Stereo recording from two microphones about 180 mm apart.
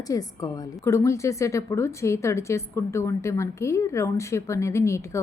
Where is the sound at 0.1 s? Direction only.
20° left (ahead or behind).